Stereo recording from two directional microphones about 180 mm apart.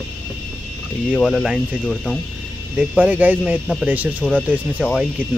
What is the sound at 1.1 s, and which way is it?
Speech, centre (ahead or behind).